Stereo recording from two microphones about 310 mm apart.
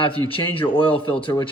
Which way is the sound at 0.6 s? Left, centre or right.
Centre.